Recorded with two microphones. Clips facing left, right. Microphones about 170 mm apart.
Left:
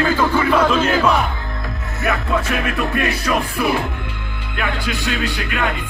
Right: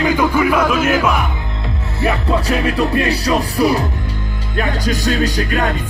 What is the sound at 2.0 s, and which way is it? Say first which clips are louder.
Music: right 3 dB; 30° right (ahead or behind).